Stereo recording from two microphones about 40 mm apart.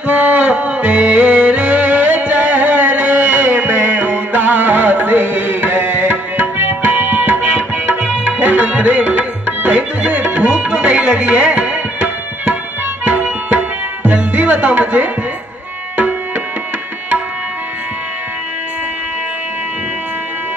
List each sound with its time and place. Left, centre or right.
0.0 s music: right
13.5 s tabla: right